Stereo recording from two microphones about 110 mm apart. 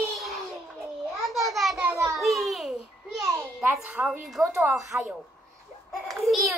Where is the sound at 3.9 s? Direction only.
10° right (ahead or behind).